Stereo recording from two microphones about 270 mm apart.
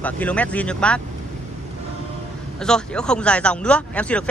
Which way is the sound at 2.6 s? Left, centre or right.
Centre.